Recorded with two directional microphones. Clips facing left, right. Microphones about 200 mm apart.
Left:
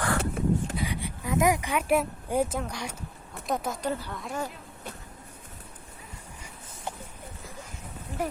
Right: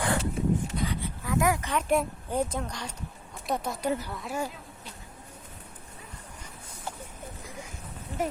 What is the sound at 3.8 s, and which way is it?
Speech, 10° right (ahead or behind).